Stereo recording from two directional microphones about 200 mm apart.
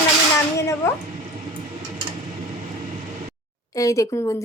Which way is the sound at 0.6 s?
15° left (ahead or behind).